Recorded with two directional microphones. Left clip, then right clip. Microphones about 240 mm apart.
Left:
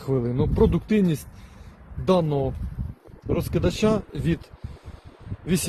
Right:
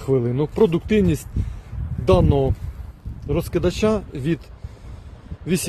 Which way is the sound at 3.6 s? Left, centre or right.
Centre.